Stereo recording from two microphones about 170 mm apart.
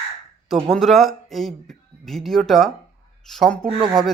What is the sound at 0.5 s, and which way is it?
Speech, centre (ahead or behind).